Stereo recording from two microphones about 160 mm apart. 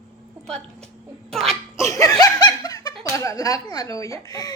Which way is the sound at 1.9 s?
20° left (ahead or behind).